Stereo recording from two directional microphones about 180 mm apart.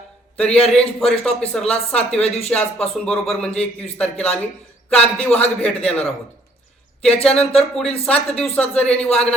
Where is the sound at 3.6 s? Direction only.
35° left (ahead or behind).